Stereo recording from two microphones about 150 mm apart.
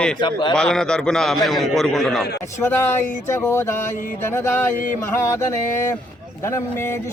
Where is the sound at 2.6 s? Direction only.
15° left (ahead or behind).